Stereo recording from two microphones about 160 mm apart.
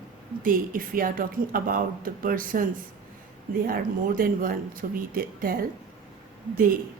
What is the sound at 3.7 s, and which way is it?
Speech, 65° right (ahead or behind).